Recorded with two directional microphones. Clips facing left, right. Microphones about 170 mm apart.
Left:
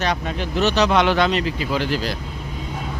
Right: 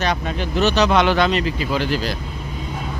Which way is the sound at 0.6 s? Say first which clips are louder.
Right 1 dB; 90° right.